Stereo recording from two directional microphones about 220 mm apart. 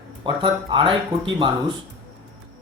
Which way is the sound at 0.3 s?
20° right (ahead or behind).